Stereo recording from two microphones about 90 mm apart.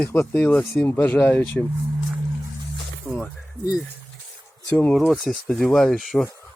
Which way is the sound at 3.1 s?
15° right (ahead or behind).